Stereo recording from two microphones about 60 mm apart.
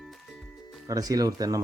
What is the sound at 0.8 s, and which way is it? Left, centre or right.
Speech, right.